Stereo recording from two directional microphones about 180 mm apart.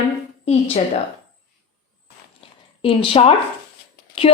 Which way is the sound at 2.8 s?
30° left (ahead or behind).